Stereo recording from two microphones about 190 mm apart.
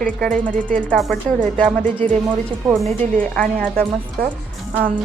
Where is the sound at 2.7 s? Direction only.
Centre (ahead or behind).